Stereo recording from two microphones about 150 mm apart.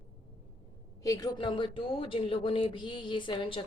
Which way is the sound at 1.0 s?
25° left (ahead or behind).